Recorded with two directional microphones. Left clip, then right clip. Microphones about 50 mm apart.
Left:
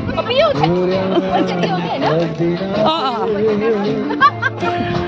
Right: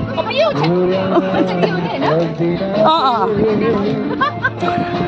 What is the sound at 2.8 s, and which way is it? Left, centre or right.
Speech, right.